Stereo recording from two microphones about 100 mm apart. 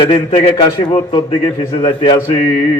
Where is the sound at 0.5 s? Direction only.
55° left (ahead or behind).